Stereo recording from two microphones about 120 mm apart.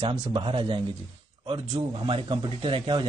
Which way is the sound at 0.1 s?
45° right (ahead or behind).